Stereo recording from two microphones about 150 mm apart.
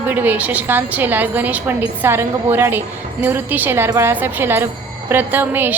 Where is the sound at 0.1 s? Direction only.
10° right (ahead or behind).